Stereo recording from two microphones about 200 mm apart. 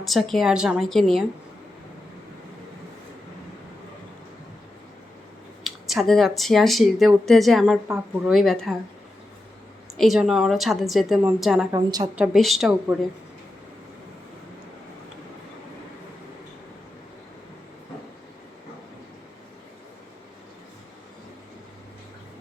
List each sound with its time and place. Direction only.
0.0 s speech: centre (ahead or behind)
5.6 s speech: centre (ahead or behind)
10.0 s a woman's voice: centre (ahead or behind)
11.7 s a woman's voice: 20° right (ahead or behind)
12.1 s speech: 5° right (ahead or behind)